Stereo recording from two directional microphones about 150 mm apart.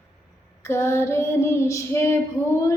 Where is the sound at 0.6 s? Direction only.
15° left (ahead or behind).